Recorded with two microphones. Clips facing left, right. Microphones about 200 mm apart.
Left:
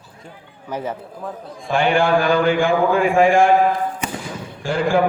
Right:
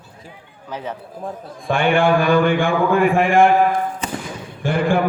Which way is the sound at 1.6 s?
55° right (ahead or behind).